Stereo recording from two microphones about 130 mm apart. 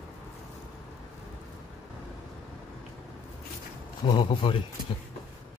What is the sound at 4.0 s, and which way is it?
Speech, 35° left (ahead or behind).